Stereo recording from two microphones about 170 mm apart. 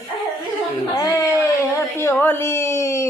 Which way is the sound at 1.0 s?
20° left (ahead or behind).